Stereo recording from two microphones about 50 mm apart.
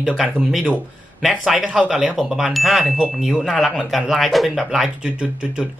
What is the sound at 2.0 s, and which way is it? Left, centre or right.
Speech, centre.